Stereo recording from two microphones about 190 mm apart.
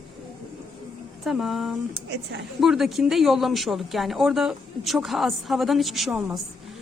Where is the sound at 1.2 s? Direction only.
Centre (ahead or behind).